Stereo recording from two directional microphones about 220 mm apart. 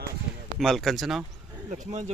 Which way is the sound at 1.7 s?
35° right (ahead or behind).